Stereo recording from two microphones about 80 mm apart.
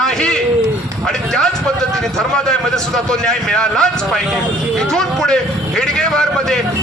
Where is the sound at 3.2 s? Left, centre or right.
Centre.